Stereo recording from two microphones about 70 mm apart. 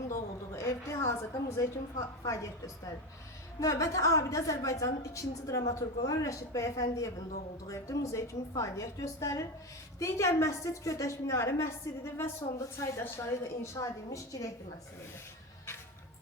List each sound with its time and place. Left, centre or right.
0.1 s a sound: left
2.2 s a woman's voice: left
13.1 s a woman's voice: left
13.7 s a woman's voice: left